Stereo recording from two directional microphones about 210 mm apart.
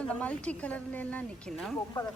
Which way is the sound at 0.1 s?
5° left (ahead or behind).